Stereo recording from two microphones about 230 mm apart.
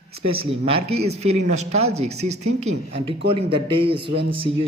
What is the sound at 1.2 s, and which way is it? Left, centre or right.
Speech, right.